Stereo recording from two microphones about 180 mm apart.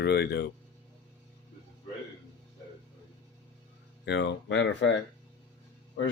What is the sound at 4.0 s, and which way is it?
Speech, 75° left (ahead or behind).